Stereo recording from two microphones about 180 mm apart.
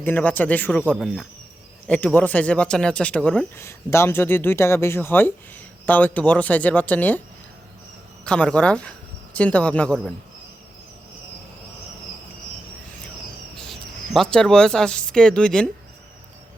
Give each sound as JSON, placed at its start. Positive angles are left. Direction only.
{"t": 0.0, "sound": "speech", "side_deg": 10}
{"t": 8.2, "sound": "speech", "side_deg": 5}
{"t": 13.7, "sound": "speech", "side_deg": 0}